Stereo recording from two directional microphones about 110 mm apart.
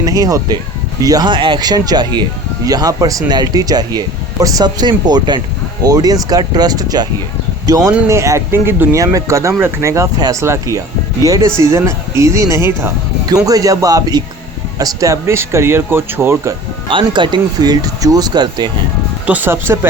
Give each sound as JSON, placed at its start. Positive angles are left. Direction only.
{"t": 0.0, "sound": "speech", "side_deg": -35}
{"t": 16.9, "sound": "speech", "side_deg": -45}
{"t": 19.2, "sound": "speech", "side_deg": -15}